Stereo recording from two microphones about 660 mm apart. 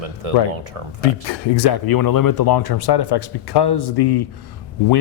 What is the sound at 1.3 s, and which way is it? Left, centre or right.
Speech, left.